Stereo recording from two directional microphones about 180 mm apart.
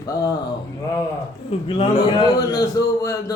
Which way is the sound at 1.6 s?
30° left (ahead or behind).